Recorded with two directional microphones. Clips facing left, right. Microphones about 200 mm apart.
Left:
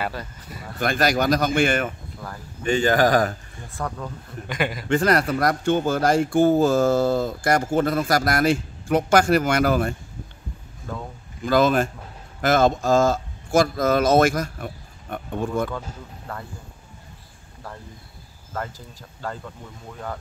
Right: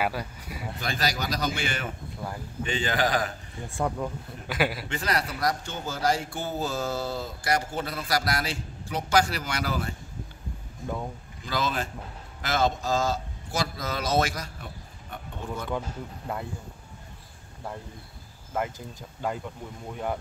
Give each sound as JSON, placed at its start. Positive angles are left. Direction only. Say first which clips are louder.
{"t": 0.0, "sound": "speech", "louder": "right 1 dB", "side_deg": -10}
{"t": 0.7, "sound": "speech", "louder": "left 10 dB", "side_deg": 55}
{"t": 3.7, "sound": "speech", "louder": "right 2 dB", "side_deg": -20}
{"t": 4.5, "sound": "a man's voice", "louder": "left 1 dB", "side_deg": -5}
{"t": 4.8, "sound": "speech", "louder": "left 10 dB", "side_deg": 50}
{"t": 11.4, "sound": "a man's voice", "louder": "left 11 dB", "side_deg": 50}
{"t": 19.9, "sound": "speech", "louder": "right 2 dB", "side_deg": -15}